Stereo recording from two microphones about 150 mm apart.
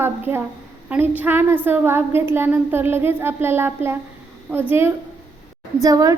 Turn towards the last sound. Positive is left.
turn(degrees=-25)  # may be behind; listen again after turning